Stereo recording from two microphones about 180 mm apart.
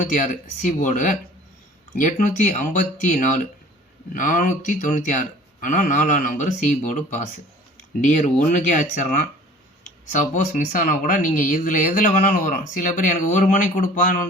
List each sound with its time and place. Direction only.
0.0 s speech: 45° left (ahead or behind)